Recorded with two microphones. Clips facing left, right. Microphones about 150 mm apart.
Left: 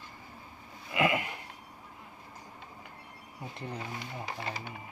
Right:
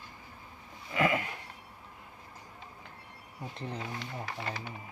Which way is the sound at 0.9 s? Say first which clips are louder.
Even; 15° left (ahead or behind).